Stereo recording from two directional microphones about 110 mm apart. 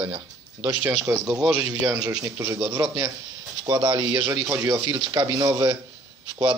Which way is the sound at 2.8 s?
40° right (ahead or behind).